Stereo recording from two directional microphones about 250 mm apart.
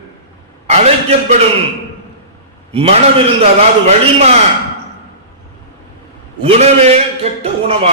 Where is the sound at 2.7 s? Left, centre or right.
Right.